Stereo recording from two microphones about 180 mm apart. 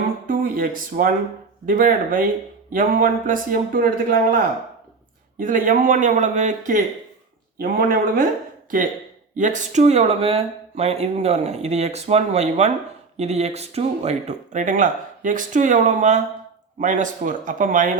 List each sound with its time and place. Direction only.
0.3 s speech: 50° right (ahead or behind)
5.4 s speech: 45° right (ahead or behind)